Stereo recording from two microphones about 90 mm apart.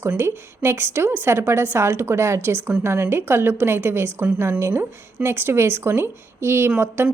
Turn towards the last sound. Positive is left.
turn(degrees=-25)  # may be behind; listen again after turning